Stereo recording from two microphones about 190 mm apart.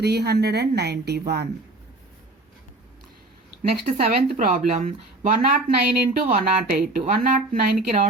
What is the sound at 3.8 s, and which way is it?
Speech, 40° right (ahead or behind).